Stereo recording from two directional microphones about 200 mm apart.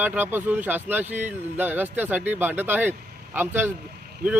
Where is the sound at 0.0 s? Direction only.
10° right (ahead or behind).